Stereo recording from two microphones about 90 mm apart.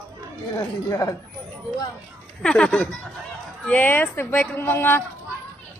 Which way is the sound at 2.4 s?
10° left (ahead or behind).